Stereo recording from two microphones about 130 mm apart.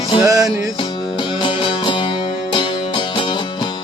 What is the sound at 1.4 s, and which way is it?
Music, 40° left (ahead or behind).